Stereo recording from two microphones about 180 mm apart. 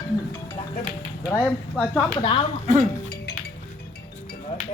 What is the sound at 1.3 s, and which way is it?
Speech, 10° left (ahead or behind).